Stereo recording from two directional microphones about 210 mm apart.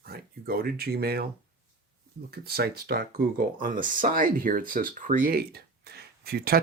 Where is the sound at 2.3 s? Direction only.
50° right (ahead or behind).